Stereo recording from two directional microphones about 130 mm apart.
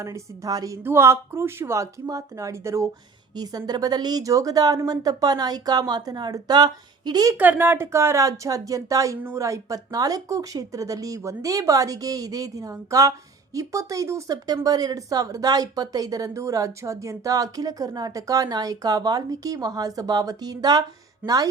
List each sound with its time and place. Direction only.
0.0 s a woman's voice: 25° right (ahead or behind)
7.3 s speech: 15° right (ahead or behind); by 21.5 s 30° right (ahead or behind)